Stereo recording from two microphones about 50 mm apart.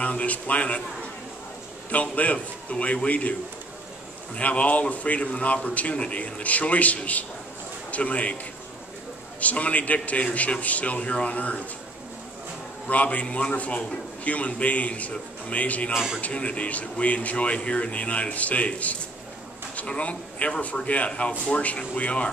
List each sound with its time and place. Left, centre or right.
0.0 s a man's voice: left
1.9 s a man's voice: left
4.4 s a man's voice: left
9.4 s a man's voice: left
12.8 s a man's voice: left
15.9 s a man's voice: centre
16.2 s a man's voice: left